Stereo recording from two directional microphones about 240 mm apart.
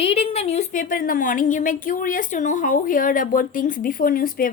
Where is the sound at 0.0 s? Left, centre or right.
Left.